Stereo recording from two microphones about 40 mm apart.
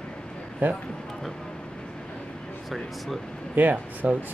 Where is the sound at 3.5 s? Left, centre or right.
Right.